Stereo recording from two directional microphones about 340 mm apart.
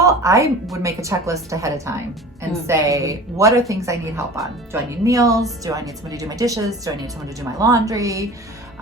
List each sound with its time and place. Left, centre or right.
0.0 s speech: centre